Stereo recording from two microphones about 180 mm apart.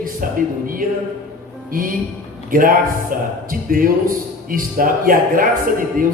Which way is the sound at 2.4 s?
50° right (ahead or behind).